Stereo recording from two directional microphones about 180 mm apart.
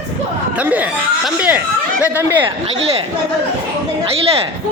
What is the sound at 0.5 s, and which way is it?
Speech, 10° right (ahead or behind).